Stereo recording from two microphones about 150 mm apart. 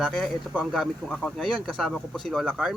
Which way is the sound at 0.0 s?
Centre (ahead or behind).